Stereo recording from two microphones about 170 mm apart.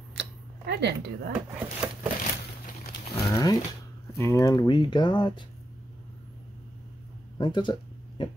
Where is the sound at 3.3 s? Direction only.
20° left (ahead or behind).